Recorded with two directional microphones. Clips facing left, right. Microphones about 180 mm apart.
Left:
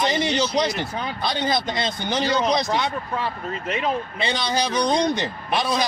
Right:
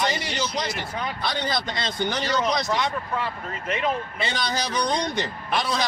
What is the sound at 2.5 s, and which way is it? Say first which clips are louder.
Speech: left 3 dB; 30° left (ahead or behind).